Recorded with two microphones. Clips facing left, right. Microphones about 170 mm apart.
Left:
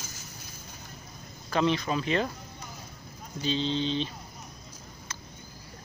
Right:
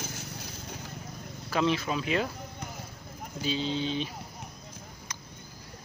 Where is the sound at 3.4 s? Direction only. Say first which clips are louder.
Left 2 dB; 10° right (ahead or behind).